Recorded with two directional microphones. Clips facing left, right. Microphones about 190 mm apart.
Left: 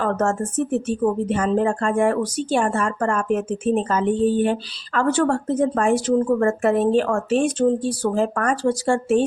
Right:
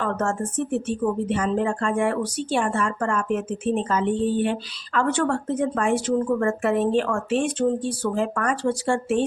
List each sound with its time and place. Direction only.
0.0 s a woman's voice: 40° left (ahead or behind)